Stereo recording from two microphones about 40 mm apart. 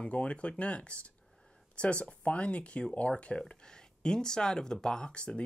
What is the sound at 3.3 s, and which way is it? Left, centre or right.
Speech, centre.